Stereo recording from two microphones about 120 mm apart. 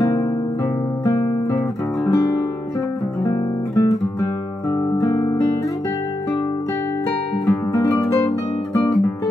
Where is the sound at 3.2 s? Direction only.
30° left (ahead or behind).